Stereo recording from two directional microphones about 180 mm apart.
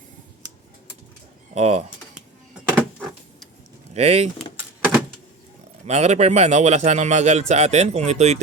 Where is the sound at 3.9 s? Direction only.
35° right (ahead or behind).